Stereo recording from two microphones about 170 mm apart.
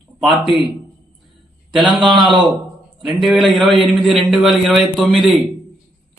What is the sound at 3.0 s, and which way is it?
A man's voice, centre (ahead or behind).